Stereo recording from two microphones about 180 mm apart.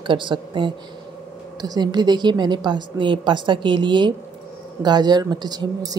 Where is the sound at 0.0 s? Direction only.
25° right (ahead or behind).